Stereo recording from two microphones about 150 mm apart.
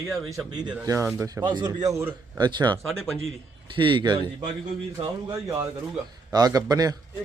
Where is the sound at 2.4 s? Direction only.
30° right (ahead or behind).